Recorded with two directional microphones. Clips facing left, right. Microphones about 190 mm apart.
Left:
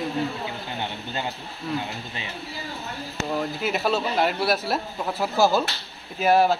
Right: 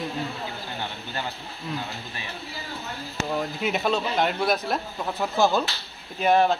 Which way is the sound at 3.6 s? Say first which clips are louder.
Even; centre (ahead or behind).